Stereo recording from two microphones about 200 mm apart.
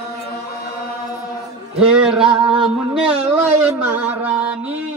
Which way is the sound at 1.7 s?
5° right (ahead or behind).